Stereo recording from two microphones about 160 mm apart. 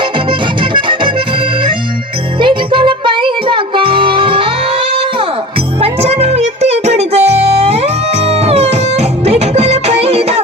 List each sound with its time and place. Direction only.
0.3 s music: 30° right (ahead or behind)
2.4 s music: 30° right (ahead or behind)
5.8 s music: 40° right (ahead or behind)